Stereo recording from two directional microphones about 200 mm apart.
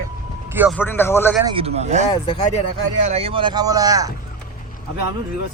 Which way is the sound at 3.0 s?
30° right (ahead or behind).